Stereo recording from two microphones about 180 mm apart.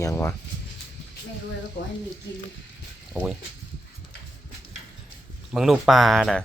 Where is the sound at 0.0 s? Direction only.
15° left (ahead or behind).